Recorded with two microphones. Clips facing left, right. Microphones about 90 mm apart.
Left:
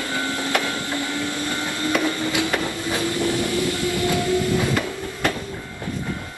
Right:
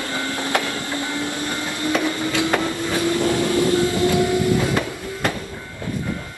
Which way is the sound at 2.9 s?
20° right (ahead or behind).